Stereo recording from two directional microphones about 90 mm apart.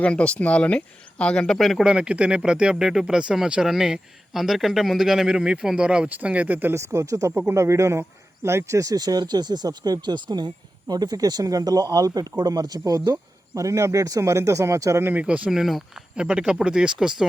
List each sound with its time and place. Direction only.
0.0 s speech: 15° left (ahead or behind)
1.9 s speech: 10° right (ahead or behind); by 15.1 s 35° right (ahead or behind)
15.1 s speech: 15° right (ahead or behind)